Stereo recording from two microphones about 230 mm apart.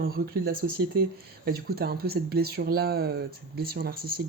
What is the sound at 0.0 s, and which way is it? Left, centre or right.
Speech, right.